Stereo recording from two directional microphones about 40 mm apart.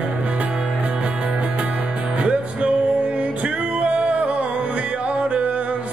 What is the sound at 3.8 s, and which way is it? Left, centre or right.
Music, right.